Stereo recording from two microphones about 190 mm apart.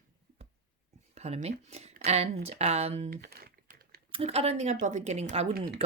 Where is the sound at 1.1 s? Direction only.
35° right (ahead or behind).